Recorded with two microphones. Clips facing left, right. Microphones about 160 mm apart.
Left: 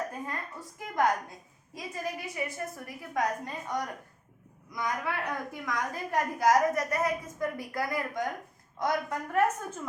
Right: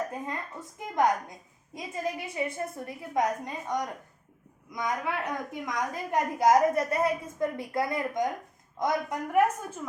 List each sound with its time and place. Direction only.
0.1 s a woman's voice: 20° right (ahead or behind)